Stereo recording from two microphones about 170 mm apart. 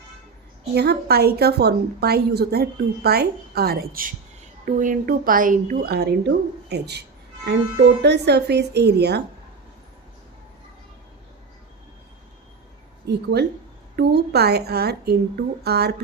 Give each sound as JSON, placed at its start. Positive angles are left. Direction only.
{"t": 0.7, "sound": "a woman's voice", "side_deg": -70}
{"t": 4.6, "sound": "a woman's voice", "side_deg": -50}
{"t": 13.1, "sound": "a woman's voice", "side_deg": -75}